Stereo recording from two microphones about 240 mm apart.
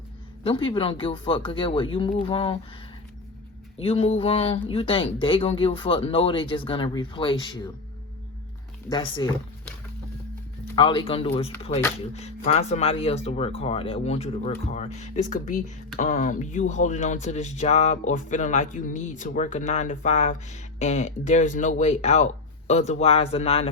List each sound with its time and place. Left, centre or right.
0.4 s speech: left
3.8 s speech: left
8.9 s speech: centre
10.8 s speech: left